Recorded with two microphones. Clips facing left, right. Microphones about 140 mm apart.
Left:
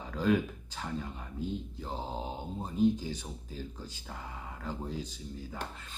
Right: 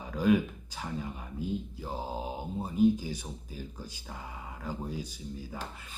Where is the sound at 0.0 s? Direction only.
10° right (ahead or behind).